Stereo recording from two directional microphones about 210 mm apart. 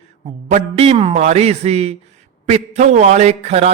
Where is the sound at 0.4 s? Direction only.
30° right (ahead or behind).